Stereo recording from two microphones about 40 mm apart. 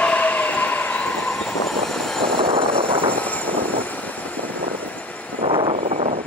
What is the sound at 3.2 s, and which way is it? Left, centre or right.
Vehicle, left.